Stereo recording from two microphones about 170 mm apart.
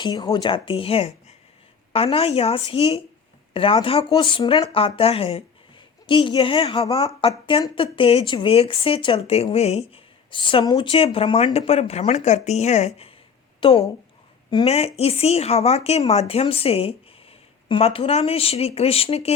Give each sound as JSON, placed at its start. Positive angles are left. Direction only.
{"t": 0.0, "sound": "speech", "side_deg": 25}